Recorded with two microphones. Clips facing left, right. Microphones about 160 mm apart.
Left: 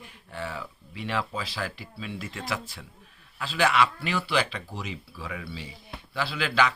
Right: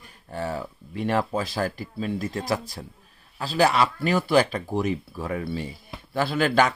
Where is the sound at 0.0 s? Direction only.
40° right (ahead or behind).